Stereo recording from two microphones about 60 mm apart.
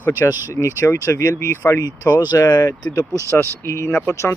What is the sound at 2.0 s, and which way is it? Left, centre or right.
Speech, left.